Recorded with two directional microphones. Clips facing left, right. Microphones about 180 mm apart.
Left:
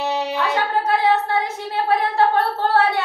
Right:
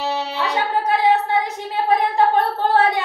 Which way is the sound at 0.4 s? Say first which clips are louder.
Right 1 dB; 15° right (ahead or behind).